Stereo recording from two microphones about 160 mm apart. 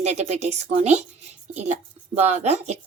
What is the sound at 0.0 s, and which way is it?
A woman's voice, 45° right (ahead or behind).